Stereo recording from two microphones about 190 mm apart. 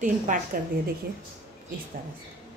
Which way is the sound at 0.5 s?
50° right (ahead or behind).